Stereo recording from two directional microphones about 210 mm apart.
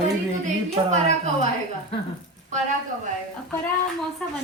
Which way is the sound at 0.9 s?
35° right (ahead or behind).